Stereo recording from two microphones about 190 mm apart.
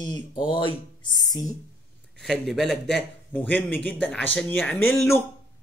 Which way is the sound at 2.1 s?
Centre (ahead or behind).